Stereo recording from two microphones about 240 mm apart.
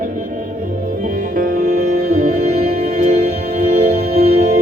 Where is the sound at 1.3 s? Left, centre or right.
Right.